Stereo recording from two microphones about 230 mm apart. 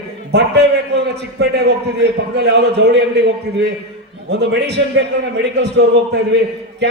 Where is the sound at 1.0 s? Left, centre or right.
Right.